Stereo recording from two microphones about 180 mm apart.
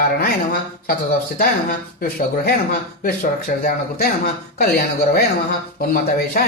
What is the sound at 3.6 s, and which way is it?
Speech, 55° left (ahead or behind).